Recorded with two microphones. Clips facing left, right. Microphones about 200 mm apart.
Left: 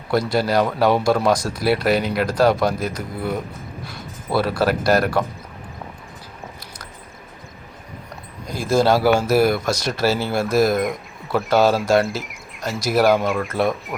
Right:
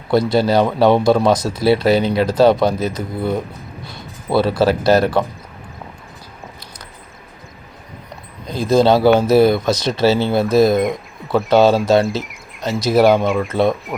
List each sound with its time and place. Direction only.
0.1 s speech: 25° right (ahead or behind)
8.6 s speech: 20° right (ahead or behind)
11.3 s speech: centre (ahead or behind)